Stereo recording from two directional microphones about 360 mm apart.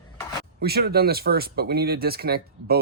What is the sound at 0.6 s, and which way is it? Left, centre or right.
Speech, right.